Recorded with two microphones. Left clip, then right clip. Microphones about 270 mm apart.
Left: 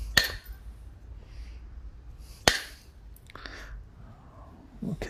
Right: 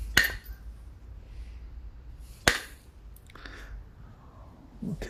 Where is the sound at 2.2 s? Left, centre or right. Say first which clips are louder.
Left 1 dB; centre.